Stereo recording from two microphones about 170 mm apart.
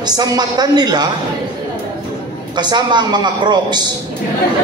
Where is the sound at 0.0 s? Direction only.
20° right (ahead or behind).